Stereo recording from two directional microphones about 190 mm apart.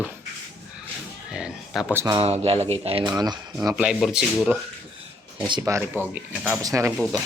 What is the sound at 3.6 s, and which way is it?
Speech, 10° right (ahead or behind).